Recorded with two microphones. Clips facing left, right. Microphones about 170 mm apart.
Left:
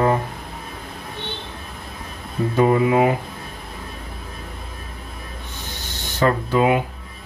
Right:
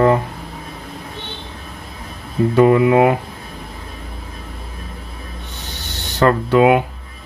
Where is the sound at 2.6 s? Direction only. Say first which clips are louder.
Right 4 dB; 70° right (ahead or behind).